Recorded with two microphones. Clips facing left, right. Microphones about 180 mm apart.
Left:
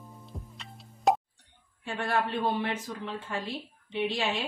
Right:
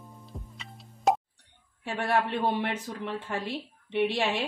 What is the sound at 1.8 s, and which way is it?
A woman's voice, 65° right (ahead or behind).